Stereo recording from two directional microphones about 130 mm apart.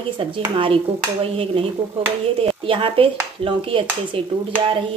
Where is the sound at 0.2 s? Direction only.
40° right (ahead or behind).